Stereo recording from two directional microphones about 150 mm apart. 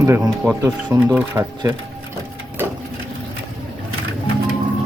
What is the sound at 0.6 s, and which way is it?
Speech, 20° right (ahead or behind).